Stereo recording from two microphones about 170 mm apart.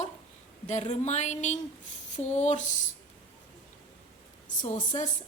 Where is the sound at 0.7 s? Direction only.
40° left (ahead or behind).